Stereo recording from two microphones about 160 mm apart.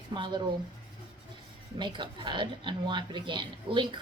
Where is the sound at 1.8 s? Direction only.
30° right (ahead or behind).